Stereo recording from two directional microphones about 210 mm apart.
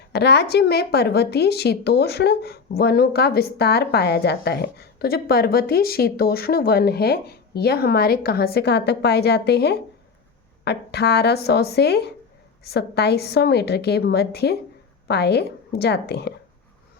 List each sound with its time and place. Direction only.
0.1 s a woman's voice: 50° left (ahead or behind)